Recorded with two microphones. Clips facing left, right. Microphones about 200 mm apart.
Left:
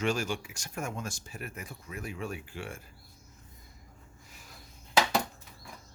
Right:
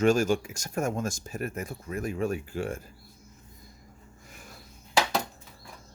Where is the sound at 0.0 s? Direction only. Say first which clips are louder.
Right 8 dB; 45° right (ahead or behind).